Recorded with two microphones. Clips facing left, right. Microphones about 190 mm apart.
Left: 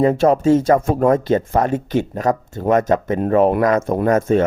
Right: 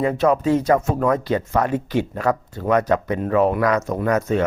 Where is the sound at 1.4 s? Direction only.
45° left (ahead or behind).